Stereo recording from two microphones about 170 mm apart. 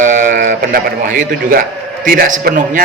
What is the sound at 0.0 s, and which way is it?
A man's voice, 50° right (ahead or behind).